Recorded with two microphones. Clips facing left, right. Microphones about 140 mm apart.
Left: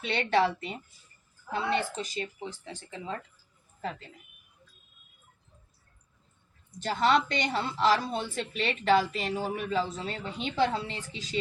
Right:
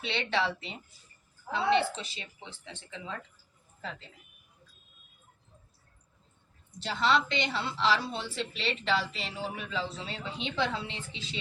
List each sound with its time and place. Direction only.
0.0 s a woman's voice: 45° left (ahead or behind)
6.7 s a woman's voice: 45° left (ahead or behind)